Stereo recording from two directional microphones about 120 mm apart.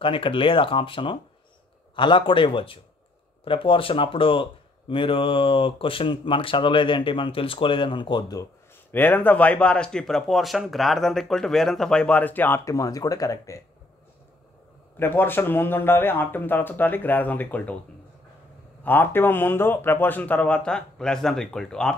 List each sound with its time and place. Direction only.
0.0 s speech: 45° left (ahead or behind)
8.9 s speech: 15° left (ahead or behind)
15.0 s speech: 15° left (ahead or behind)
18.9 s speech: 15° left (ahead or behind)